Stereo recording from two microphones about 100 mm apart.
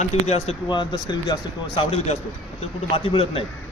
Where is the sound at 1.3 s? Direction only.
50° left (ahead or behind).